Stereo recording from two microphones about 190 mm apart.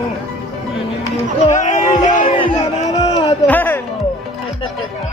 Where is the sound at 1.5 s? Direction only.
40° left (ahead or behind).